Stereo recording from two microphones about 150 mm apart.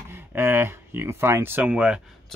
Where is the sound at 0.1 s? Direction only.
15° right (ahead or behind).